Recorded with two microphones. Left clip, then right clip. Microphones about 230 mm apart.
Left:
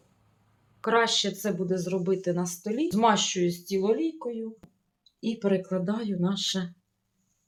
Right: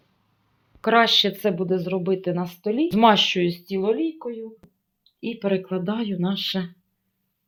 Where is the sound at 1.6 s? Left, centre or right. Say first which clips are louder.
Right 4 dB; right.